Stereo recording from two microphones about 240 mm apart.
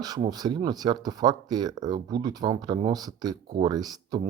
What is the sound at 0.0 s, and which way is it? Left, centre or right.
Speech, centre.